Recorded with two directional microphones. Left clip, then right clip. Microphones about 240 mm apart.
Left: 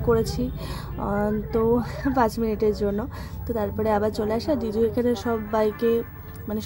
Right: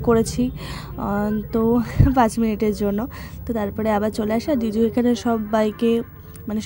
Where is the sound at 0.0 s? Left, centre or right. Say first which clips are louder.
Right 4 dB; right.